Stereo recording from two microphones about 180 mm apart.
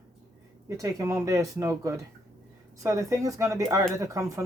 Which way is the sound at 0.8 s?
15° right (ahead or behind).